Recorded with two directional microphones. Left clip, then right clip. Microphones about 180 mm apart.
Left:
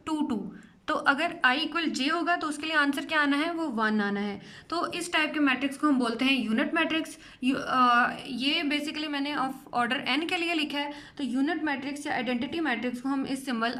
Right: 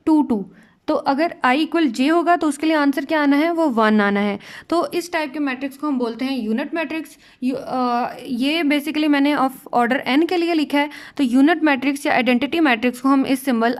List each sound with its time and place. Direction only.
0.0 s a sound: 30° right (ahead or behind)
0.9 s a woman's voice: 25° right (ahead or behind)
3.6 s a woman's voice: 50° right (ahead or behind)